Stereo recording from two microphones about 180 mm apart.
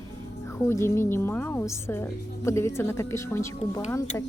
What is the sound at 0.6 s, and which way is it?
A woman's voice, 15° left (ahead or behind).